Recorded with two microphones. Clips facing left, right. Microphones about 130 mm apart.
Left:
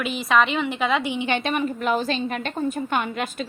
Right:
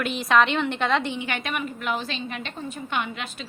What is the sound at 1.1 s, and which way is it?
A woman's voice, 25° left (ahead or behind).